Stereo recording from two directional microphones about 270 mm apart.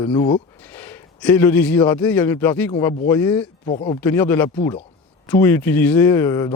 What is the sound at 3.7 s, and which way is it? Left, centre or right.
Speech, left.